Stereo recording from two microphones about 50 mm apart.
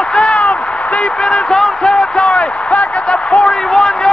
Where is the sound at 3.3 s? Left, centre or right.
Centre.